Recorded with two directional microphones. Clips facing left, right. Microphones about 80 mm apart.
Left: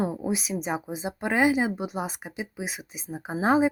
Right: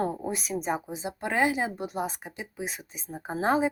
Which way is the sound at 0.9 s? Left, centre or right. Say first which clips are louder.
Left 3 dB; centre.